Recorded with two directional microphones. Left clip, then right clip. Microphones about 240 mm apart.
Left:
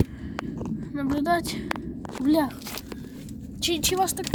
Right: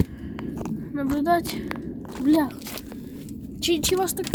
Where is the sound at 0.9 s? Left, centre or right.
Left.